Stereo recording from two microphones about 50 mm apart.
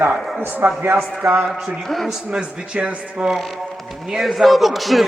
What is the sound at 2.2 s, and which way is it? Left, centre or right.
Speech, right.